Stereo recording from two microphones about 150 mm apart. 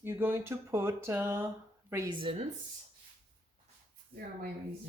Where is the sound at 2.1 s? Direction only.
35° right (ahead or behind).